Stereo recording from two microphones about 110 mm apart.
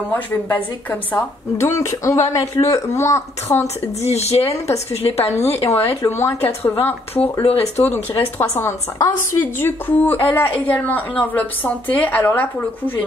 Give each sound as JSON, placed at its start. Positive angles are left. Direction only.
{"t": 0.1, "sound": "a woman's voice", "side_deg": 15}
{"t": 4.0, "sound": "a woman's voice", "side_deg": 75}
{"t": 5.2, "sound": "a woman's voice", "side_deg": 25}
{"t": 5.5, "sound": "a woman's voice", "side_deg": 70}
{"t": 6.0, "sound": "a woman's voice", "side_deg": 25}
{"t": 9.4, "sound": "a woman's voice", "side_deg": 20}